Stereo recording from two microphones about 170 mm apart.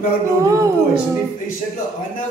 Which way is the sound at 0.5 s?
20° right (ahead or behind).